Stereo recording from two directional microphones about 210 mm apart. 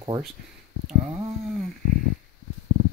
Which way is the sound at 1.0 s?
30° right (ahead or behind).